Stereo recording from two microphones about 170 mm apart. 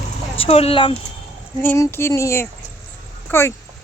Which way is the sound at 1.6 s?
10° left (ahead or behind).